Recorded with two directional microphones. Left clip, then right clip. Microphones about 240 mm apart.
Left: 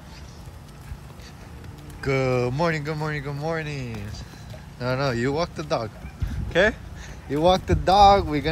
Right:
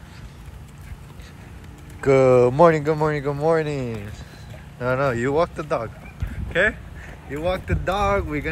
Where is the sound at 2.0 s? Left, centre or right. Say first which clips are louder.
Right 9 dB; centre.